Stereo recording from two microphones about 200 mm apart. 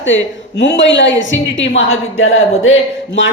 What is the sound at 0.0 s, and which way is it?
A woman's voice, 65° left (ahead or behind).